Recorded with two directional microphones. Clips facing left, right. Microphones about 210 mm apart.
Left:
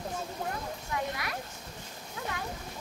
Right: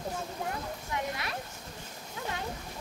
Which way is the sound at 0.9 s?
25° right (ahead or behind).